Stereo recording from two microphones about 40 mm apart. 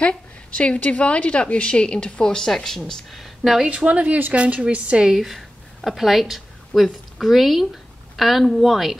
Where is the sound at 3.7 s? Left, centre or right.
Right.